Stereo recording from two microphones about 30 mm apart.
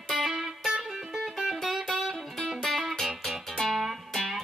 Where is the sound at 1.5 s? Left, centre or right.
Centre.